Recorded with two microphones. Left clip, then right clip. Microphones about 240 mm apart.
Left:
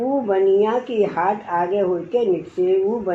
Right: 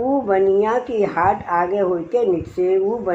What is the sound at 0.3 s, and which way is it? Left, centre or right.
Speech, right.